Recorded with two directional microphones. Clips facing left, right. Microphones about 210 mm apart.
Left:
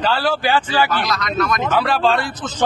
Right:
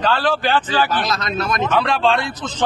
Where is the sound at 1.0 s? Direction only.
25° right (ahead or behind).